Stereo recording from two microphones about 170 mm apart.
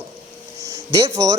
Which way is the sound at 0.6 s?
20° right (ahead or behind).